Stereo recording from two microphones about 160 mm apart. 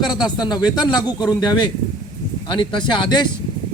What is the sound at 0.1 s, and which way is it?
A man's voice, 25° left (ahead or behind).